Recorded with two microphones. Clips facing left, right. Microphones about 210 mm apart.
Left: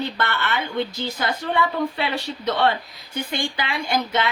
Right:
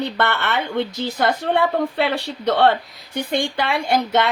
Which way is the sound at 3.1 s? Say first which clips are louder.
Right 5 dB; 65° right (ahead or behind).